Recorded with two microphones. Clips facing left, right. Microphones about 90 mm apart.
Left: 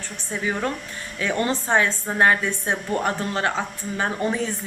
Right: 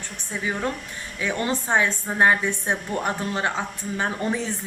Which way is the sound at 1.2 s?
15° right (ahead or behind).